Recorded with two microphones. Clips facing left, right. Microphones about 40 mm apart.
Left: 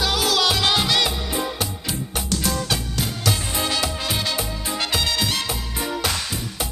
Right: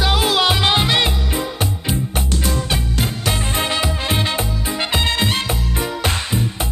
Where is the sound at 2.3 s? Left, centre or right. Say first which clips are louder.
Left 1 dB; right.